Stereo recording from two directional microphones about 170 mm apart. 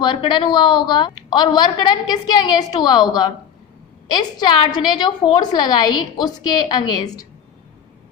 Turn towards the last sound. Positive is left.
turn(degrees=20)  # may be behind; listen again after turning